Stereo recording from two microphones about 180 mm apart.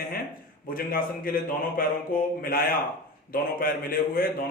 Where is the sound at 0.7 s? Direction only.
55° left (ahead or behind).